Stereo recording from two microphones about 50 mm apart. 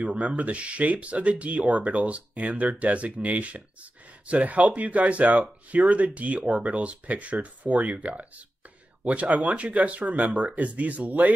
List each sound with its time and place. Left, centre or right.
0.0 s speech: right